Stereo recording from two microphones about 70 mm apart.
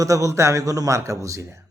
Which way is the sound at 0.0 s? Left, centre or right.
Right.